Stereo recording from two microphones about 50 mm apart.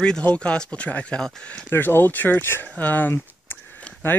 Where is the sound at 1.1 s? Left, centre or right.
Centre.